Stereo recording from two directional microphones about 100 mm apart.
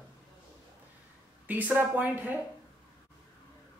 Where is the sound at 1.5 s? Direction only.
15° right (ahead or behind).